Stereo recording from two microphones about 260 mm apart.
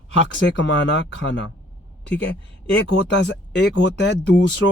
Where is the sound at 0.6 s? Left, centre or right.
Left.